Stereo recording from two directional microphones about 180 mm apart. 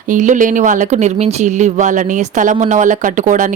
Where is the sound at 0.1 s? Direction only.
45° right (ahead or behind).